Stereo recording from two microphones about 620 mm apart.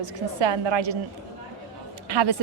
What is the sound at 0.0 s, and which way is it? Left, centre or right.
Speech, right.